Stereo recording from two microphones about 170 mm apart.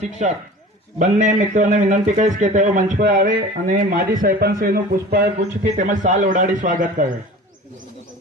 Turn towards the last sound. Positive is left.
turn(degrees=-50)  # may be behind; listen again after turning